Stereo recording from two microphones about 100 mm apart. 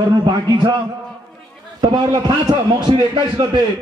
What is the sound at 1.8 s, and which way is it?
A man's voice, 45° right (ahead or behind).